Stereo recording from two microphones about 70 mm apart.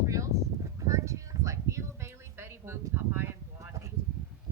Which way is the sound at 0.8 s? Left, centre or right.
Right.